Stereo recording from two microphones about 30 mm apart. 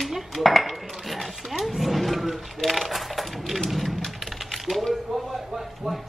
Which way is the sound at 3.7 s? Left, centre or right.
Centre.